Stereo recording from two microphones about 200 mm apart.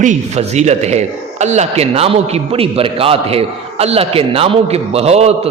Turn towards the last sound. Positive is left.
turn(degrees=-30)  # may be behind; listen again after turning